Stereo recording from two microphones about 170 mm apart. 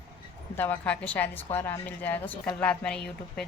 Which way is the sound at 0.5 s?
10° left (ahead or behind).